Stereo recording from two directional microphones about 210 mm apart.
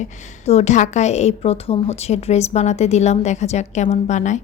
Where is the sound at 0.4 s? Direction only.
30° left (ahead or behind).